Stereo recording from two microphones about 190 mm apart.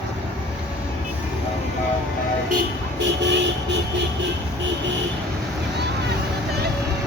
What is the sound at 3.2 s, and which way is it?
Vehicle, 65° right (ahead or behind).